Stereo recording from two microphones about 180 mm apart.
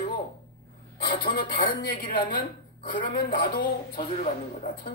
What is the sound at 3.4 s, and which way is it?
Speech, 50° left (ahead or behind).